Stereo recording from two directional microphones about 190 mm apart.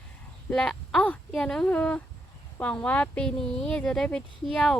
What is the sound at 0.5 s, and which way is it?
Speech, 5° left (ahead or behind).